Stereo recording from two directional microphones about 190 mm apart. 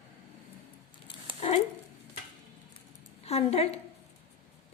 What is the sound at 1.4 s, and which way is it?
Speech, 30° left (ahead or behind).